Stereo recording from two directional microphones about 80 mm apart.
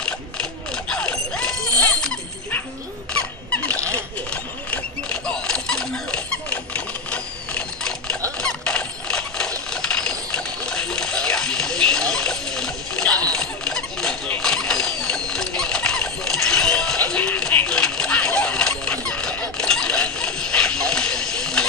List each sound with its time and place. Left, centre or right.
0.0 s mechanisms: centre
3.1 s squeak: centre
3.9 s mechanisms: centre
8.4 s squeal: centre
9.7 s a sound: centre